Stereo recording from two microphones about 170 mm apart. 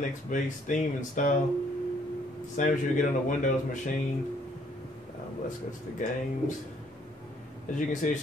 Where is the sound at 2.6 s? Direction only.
50° left (ahead or behind).